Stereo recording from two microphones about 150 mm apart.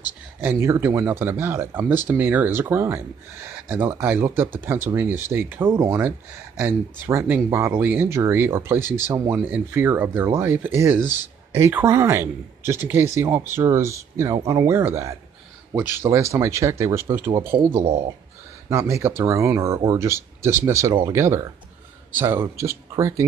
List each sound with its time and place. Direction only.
0.4 s speech: 15° right (ahead or behind)